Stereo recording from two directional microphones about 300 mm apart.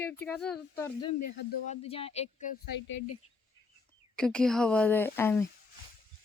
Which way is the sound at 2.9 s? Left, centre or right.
Left.